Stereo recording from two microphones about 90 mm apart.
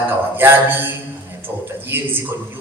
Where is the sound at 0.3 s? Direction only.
25° right (ahead or behind).